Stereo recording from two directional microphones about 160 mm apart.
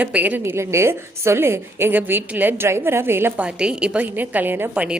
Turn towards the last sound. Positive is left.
turn(degrees=-10)  # may be behind; listen again after turning